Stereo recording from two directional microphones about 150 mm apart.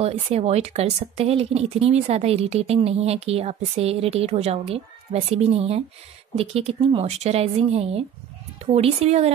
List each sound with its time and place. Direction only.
0.0 s a woman's voice: 45° right (ahead or behind)